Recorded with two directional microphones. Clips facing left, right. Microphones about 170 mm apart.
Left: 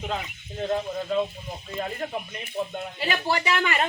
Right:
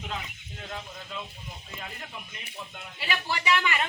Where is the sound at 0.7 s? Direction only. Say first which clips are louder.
Left 14 dB; 45° left (ahead or behind).